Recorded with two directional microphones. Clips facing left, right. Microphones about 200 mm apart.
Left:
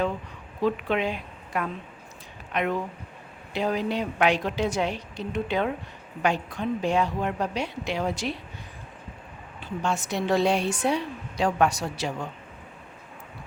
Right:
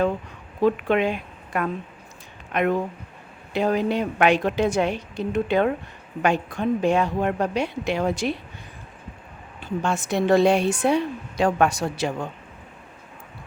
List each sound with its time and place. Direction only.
0.6 s a woman's voice: 55° right (ahead or behind)
9.8 s a woman's voice: 55° right (ahead or behind)